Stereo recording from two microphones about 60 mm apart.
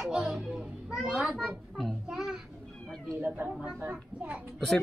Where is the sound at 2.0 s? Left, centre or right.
Centre.